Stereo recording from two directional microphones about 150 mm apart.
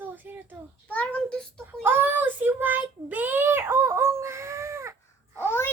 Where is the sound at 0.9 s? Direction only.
10° left (ahead or behind).